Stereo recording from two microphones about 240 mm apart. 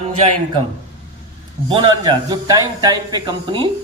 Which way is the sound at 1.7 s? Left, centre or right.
Right.